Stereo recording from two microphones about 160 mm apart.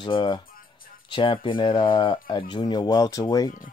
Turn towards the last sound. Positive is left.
turn(degrees=25)  # may be behind; listen again after turning